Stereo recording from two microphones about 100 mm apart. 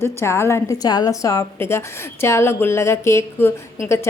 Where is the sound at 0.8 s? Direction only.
40° left (ahead or behind).